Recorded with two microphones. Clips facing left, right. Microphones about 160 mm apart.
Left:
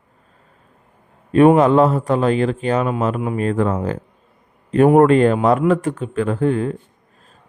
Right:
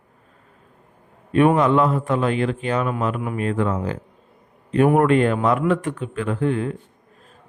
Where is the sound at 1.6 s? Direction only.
40° left (ahead or behind).